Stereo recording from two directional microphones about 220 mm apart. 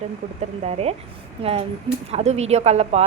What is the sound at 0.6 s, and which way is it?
Speech, 30° right (ahead or behind).